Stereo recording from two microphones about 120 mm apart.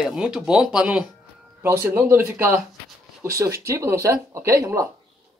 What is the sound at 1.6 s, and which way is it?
Speech, 20° right (ahead or behind).